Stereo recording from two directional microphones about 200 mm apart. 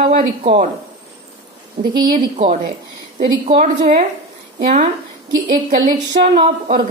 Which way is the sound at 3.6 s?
40° right (ahead or behind).